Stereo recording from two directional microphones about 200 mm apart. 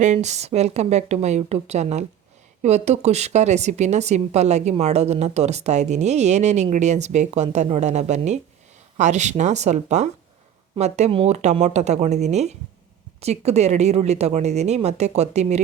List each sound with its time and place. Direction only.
0.0 s speech: 35° right (ahead or behind)